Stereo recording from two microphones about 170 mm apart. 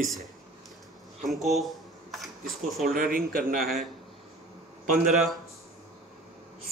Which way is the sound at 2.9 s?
55° right (ahead or behind).